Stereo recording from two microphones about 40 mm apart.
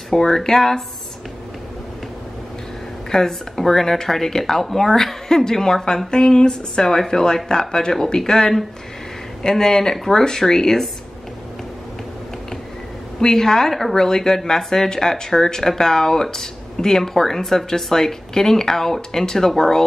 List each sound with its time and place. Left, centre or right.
0.1 s speech: centre
3.1 s speech: centre
13.2 s speech: centre